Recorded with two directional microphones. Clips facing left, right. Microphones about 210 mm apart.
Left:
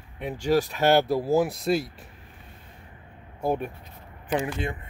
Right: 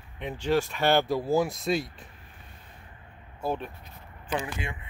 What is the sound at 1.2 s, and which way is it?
Speech, centre (ahead or behind).